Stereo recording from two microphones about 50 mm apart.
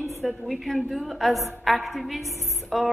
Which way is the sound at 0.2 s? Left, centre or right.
Centre.